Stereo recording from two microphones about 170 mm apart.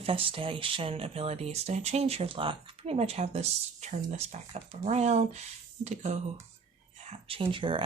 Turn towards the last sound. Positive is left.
turn(degrees=-30)  # may be behind; listen again after turning